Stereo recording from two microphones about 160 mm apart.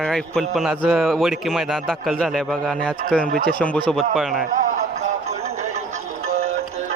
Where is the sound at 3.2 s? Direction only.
65° right (ahead or behind).